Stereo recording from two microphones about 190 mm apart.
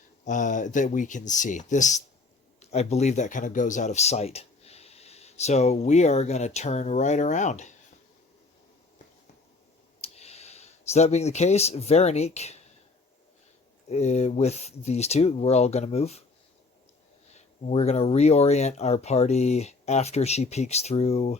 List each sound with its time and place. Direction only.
0.3 s speech: 40° left (ahead or behind)
10.0 s speech: 35° left (ahead or behind)
13.8 s speech: 35° left (ahead or behind)
17.2 s speech: 35° left (ahead or behind)